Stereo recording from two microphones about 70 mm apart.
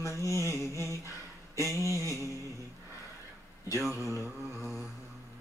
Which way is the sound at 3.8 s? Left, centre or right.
Left.